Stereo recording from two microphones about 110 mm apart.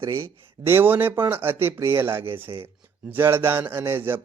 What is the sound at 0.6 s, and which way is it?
Speech, 20° right (ahead or behind).